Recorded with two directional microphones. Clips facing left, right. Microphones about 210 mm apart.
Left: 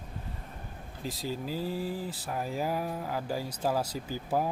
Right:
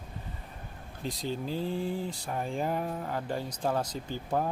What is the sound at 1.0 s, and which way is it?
Speech, 5° left (ahead or behind).